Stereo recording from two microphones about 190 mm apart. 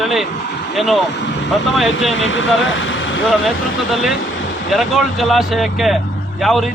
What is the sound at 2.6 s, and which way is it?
Vehicle, 90° left.